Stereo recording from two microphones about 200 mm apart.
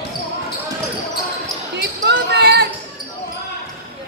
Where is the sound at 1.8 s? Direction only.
55° right (ahead or behind).